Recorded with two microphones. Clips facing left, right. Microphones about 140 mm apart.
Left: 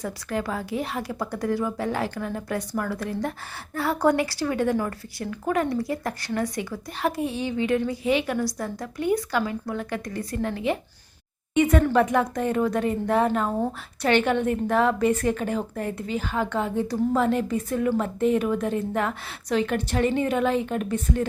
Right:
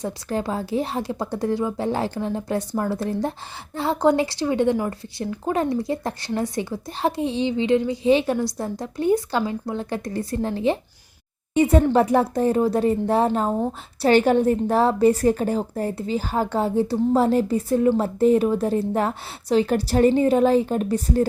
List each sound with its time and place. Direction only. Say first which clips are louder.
0.0 s a woman's voice: right 3 dB; 30° right (ahead or behind)